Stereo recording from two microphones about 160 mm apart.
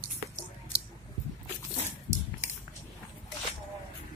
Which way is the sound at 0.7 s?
90° right.